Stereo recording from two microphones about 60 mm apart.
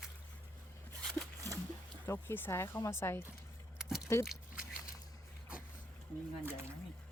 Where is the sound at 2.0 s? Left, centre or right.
Left.